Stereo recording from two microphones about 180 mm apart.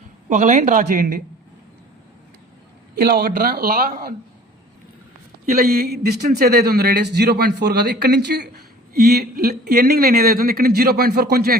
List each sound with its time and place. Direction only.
0.3 s a woman's voice: 45° right (ahead or behind)
3.0 s a man's voice: 60° right (ahead or behind)
5.6 s a man's voice: 60° right (ahead or behind)